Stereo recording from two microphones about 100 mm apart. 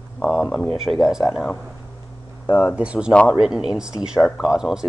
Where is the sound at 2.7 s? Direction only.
10° right (ahead or behind).